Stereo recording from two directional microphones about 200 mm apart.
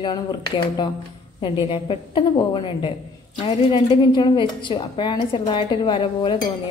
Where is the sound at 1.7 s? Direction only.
25° left (ahead or behind).